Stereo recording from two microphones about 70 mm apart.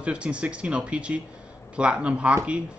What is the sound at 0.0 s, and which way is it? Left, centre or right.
Speech, centre.